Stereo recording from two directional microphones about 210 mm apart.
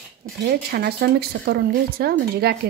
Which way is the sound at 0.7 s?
50° right (ahead or behind).